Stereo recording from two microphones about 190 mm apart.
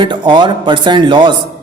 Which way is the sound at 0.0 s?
25° right (ahead or behind).